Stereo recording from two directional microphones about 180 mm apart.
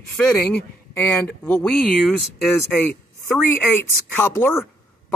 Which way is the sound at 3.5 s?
10° left (ahead or behind).